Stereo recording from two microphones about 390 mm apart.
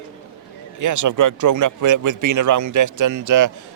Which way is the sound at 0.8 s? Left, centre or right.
Right.